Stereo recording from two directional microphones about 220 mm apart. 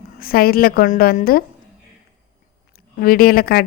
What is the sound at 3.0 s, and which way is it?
Speech, 45° left (ahead or behind).